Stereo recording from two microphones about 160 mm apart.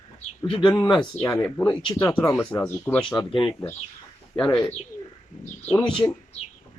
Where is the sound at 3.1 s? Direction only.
30° left (ahead or behind).